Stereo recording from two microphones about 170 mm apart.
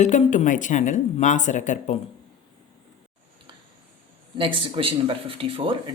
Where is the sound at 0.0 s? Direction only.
45° left (ahead or behind).